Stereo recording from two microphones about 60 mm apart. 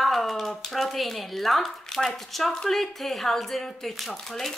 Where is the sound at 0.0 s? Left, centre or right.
Centre.